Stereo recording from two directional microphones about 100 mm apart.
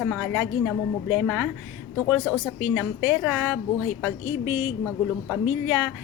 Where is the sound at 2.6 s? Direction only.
15° right (ahead or behind).